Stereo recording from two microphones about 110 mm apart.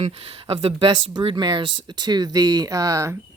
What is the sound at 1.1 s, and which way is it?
Speech, 45° right (ahead or behind).